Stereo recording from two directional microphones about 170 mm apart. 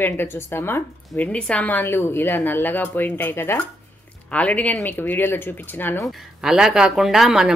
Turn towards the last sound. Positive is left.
turn(degrees=0)  # may be behind; listen again after turning